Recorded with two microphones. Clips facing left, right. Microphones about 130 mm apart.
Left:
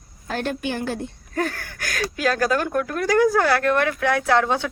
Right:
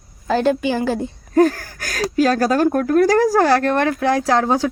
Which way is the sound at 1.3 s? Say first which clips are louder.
Right 12 dB; 35° right (ahead or behind).